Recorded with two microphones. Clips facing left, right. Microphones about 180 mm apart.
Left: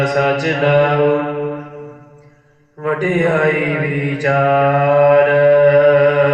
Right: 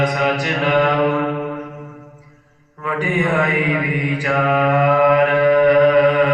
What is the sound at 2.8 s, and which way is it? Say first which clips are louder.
Speech: left 5 dB; 45° left (ahead or behind).